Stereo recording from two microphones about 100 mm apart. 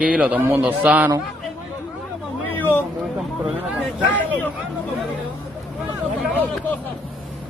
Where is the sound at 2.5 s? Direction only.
20° left (ahead or behind).